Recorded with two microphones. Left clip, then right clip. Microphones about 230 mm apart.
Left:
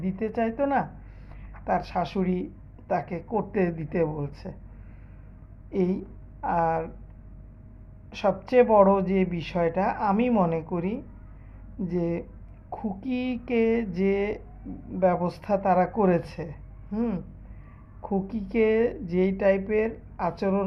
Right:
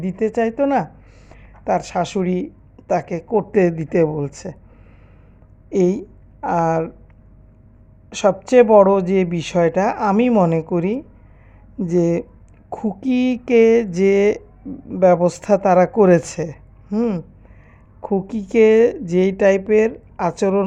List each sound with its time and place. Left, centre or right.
0.0 s a woman's voice: right
5.6 s speech: right
8.1 s a woman's voice: right